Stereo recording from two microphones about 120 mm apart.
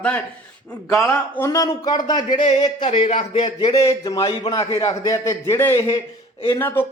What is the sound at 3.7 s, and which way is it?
A man's voice, 30° left (ahead or behind).